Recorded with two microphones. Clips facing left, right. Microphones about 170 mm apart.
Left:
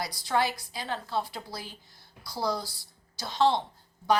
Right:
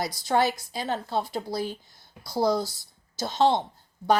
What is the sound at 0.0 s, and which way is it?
Speech, 20° right (ahead or behind).